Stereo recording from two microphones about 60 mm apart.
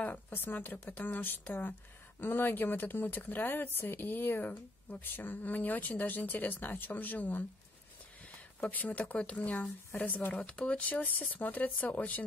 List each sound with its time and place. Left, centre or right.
0.0 s speech: left
8.5 s speech: left
10.4 s speech: centre